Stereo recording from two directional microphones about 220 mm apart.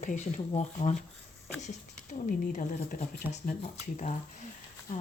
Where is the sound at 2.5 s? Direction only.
35° left (ahead or behind).